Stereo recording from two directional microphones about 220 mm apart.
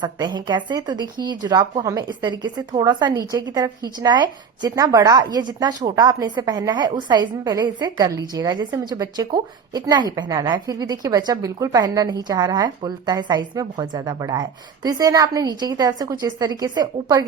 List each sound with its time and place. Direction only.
0.0 s speech: 20° right (ahead or behind)